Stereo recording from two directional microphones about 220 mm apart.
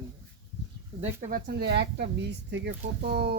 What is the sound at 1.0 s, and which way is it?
Speech, 35° right (ahead or behind).